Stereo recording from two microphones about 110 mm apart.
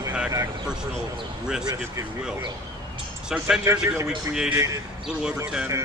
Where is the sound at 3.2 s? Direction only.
10° right (ahead or behind).